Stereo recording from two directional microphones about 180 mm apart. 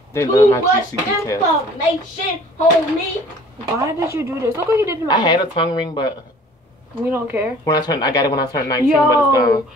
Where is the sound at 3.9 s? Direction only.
15° right (ahead or behind).